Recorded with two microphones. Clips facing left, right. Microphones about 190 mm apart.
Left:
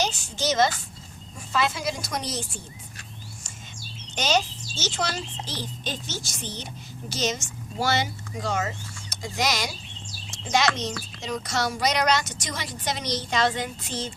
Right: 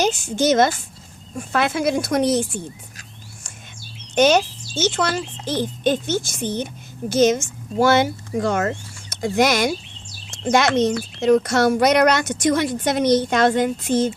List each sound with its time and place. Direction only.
0.0 s a child's voice: 50° right (ahead or behind)
4.1 s a child's voice: 55° right (ahead or behind)